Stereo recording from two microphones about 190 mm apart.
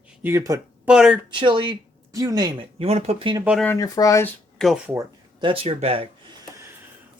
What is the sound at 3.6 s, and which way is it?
Speech, 15° left (ahead or behind).